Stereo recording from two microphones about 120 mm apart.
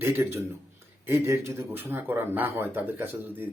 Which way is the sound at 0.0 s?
20° right (ahead or behind).